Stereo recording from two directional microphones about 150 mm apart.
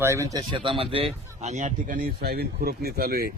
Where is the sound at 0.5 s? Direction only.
35° right (ahead or behind).